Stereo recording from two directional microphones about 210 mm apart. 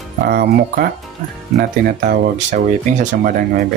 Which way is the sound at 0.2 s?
45° right (ahead or behind).